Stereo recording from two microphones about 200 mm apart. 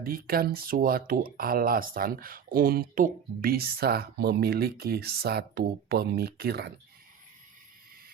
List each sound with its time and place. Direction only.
0.0 s speech: 45° right (ahead or behind)